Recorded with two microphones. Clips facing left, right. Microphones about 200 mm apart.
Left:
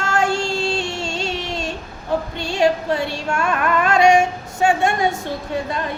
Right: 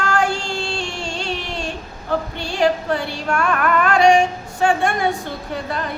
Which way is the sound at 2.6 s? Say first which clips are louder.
Left 1 dB; 25° left (ahead or behind).